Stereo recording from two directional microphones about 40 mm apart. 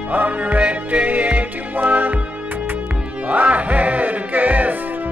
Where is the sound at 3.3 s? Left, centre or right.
Right.